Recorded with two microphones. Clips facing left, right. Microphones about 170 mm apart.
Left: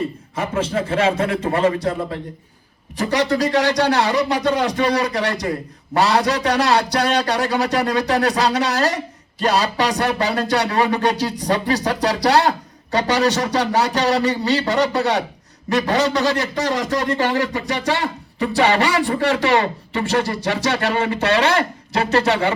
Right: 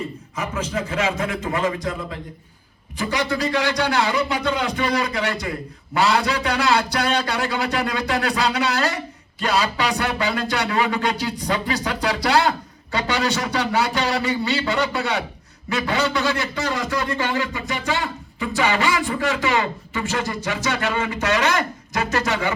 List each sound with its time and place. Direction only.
0.6 s speech: 30° left (ahead or behind)